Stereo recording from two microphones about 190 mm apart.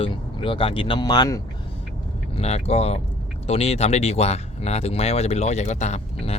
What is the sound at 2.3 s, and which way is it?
Speech, 35° left (ahead or behind).